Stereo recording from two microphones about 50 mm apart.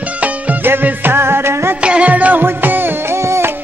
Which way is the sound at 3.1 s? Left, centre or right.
Right.